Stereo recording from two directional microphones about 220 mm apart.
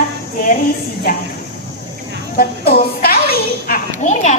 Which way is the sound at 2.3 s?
45° left (ahead or behind).